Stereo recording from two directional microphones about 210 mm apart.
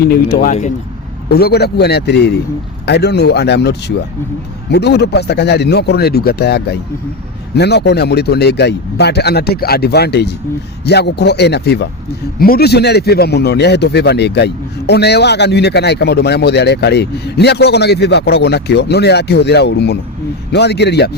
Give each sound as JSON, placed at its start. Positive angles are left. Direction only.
{"t": 0.0, "sound": "a man's voice", "side_deg": 45}
{"t": 1.3, "sound": "a man's voice", "side_deg": 50}